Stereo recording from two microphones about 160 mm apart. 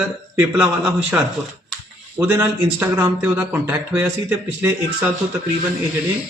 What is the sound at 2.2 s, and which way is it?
A man's voice, 15° right (ahead or behind).